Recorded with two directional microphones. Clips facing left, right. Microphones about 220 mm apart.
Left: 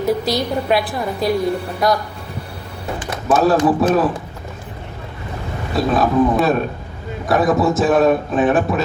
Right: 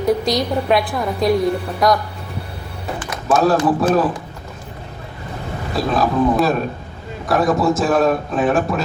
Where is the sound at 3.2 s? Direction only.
Centre (ahead or behind).